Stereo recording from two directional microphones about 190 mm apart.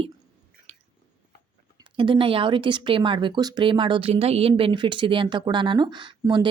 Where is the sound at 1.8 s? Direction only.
25° right (ahead or behind).